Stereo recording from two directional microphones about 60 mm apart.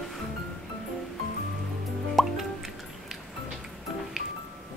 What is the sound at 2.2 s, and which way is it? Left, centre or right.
Music, centre.